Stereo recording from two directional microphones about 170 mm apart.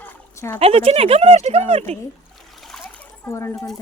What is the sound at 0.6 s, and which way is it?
Speech, 35° right (ahead or behind).